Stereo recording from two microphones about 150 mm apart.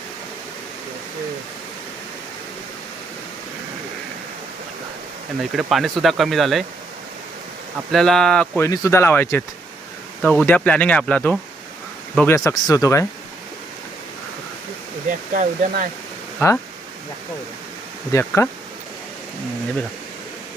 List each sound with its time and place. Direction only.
5.4 s speech: centre (ahead or behind)
7.9 s speech: 5° left (ahead or behind)
8.5 s speech: 20° left (ahead or behind)
12.5 s speech: 20° left (ahead or behind)
15.3 s speech: 65° right (ahead or behind)
18.1 s speech: 20° left (ahead or behind)